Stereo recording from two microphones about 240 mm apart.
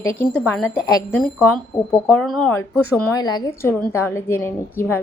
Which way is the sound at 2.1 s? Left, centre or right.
Centre.